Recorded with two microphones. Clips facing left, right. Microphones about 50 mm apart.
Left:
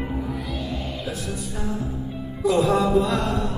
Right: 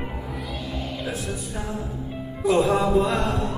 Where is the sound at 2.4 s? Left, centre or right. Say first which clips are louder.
Even; centre.